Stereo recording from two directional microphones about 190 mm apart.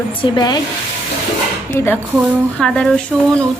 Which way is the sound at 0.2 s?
20° left (ahead or behind).